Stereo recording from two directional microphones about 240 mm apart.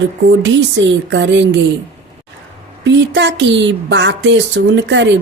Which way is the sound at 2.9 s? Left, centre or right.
Right.